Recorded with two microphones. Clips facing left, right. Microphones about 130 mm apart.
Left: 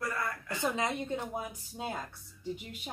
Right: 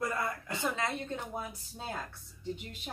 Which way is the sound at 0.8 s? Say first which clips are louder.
Left 2 dB; 15° left (ahead or behind).